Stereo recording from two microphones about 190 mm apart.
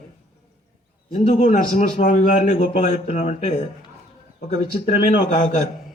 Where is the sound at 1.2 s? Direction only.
40° left (ahead or behind).